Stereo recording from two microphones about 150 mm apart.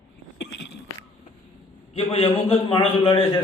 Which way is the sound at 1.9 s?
40° left (ahead or behind).